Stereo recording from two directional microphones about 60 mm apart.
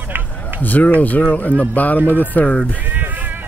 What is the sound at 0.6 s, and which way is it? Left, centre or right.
Speech, left.